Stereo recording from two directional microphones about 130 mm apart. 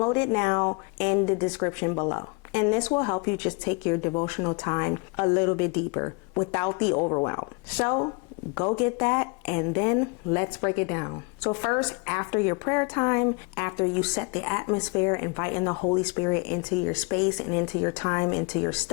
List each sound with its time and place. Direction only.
0.0 s a woman's voice: 30° left (ahead or behind)
8.5 s a woman's voice: 30° left (ahead or behind)